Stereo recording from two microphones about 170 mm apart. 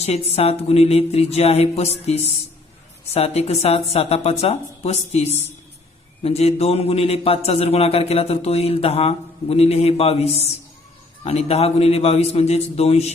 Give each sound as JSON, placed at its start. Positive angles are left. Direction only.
{"t": 0.0, "sound": "a man's voice", "side_deg": 40}